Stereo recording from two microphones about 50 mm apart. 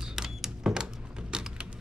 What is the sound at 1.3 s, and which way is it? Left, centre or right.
Typing, centre.